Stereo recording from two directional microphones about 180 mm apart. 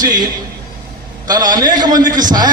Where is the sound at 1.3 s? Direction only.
20° right (ahead or behind).